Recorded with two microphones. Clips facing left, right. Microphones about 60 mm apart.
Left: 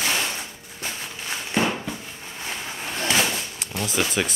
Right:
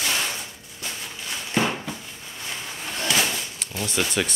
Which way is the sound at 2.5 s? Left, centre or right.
Left.